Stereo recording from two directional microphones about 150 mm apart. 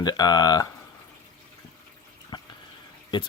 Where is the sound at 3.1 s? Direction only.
30° left (ahead or behind).